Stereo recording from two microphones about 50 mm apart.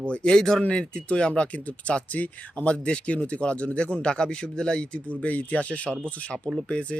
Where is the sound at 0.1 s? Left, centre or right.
Centre.